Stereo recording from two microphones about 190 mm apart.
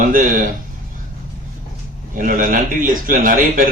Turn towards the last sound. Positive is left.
turn(degrees=-45)  # may be behind; listen again after turning